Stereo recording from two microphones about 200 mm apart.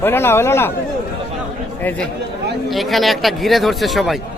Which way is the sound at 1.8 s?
10° left (ahead or behind).